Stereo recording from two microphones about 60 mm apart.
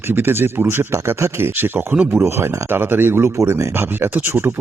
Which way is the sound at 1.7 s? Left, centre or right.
Right.